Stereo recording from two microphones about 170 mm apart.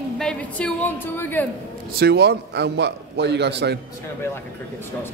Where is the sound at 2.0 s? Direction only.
75° right (ahead or behind).